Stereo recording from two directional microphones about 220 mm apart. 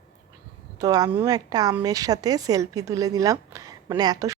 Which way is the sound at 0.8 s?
15° right (ahead or behind).